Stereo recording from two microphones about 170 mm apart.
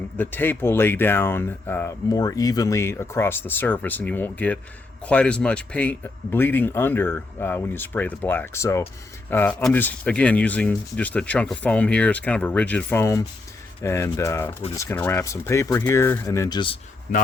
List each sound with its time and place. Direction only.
0.2 s speech: 10° left (ahead or behind)
17.1 s a man's voice: 55° left (ahead or behind)